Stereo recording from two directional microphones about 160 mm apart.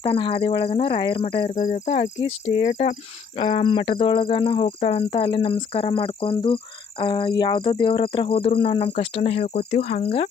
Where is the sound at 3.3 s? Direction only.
35° left (ahead or behind).